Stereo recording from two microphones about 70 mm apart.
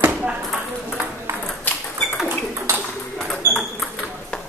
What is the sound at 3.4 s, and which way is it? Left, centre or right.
Ping, right.